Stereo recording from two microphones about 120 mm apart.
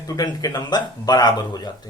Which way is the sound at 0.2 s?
30° left (ahead or behind).